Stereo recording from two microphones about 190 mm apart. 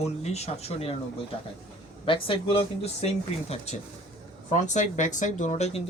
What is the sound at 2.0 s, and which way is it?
Speech, 25° left (ahead or behind).